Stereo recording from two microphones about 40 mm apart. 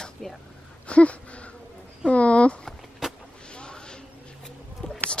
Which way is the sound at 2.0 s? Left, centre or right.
Left.